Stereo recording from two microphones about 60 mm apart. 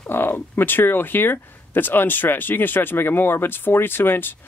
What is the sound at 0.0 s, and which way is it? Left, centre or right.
Speech, left.